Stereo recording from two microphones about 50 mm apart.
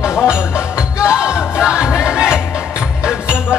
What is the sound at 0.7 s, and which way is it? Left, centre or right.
Music, centre.